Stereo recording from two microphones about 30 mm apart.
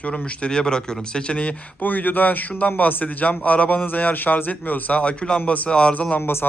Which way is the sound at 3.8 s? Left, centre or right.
Left.